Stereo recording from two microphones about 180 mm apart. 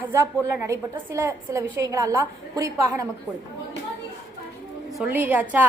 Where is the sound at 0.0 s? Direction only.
15° right (ahead or behind).